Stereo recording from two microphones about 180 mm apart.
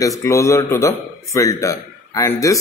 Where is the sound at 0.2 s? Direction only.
15° left (ahead or behind).